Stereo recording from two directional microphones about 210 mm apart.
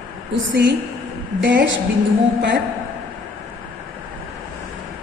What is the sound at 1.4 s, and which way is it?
Speech, 55° right (ahead or behind).